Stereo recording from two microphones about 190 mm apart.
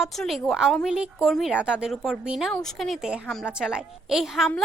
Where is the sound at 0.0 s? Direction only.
Centre (ahead or behind).